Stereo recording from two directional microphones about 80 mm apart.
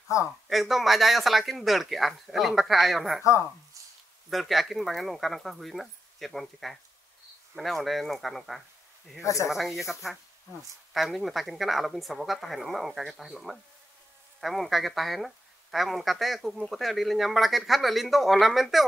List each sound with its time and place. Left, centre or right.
0.1 s speech: left
0.5 s speech: centre
4.3 s speech: centre
9.2 s speech: left
9.5 s speech: centre